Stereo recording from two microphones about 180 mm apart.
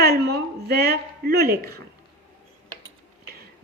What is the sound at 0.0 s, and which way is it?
A woman's voice, 60° right (ahead or behind).